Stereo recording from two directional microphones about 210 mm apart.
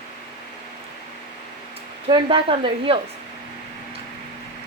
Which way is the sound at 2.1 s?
25° right (ahead or behind).